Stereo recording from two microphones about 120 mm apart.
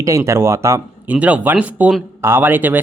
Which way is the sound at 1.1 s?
10° right (ahead or behind).